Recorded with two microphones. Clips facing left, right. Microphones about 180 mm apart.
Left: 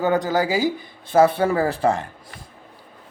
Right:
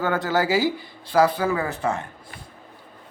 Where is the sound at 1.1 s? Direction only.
25° left (ahead or behind).